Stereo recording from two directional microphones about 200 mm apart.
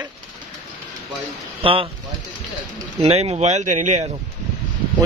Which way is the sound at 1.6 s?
25° right (ahead or behind).